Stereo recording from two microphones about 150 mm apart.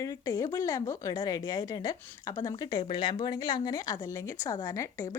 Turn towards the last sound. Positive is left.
turn(degrees=20)  # may be behind; listen again after turning